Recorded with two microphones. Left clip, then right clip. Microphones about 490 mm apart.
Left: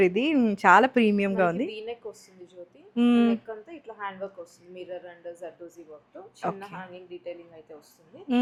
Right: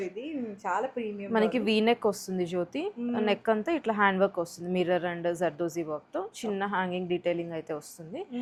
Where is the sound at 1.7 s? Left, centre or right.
Right.